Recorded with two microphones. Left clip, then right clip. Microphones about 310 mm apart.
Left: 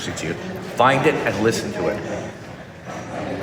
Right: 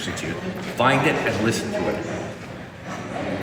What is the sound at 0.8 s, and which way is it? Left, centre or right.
Speech, centre.